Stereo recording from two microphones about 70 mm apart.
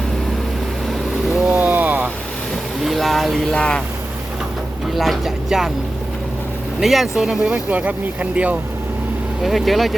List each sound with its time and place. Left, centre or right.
1.5 s a sound: right
2.8 s a sound: centre
3.6 s speech: centre
4.9 s speech: centre
6.7 s speech: centre; by 8.5 s right
9.4 s speech: centre